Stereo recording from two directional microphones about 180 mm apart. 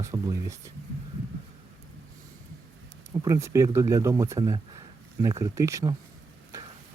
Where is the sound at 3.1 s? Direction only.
20° right (ahead or behind).